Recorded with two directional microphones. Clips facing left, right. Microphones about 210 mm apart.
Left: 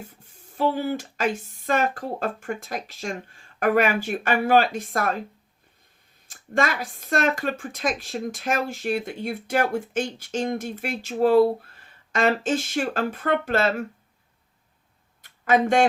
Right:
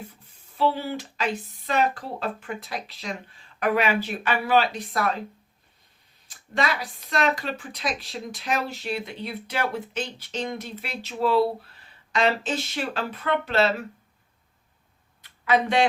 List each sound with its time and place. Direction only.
0.1 s speech: 45° left (ahead or behind)
6.2 s speech: 50° left (ahead or behind)
15.2 s a sound: 45° left (ahead or behind)